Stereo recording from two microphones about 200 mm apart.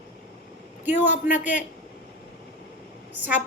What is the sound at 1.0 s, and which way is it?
Speech, 40° left (ahead or behind).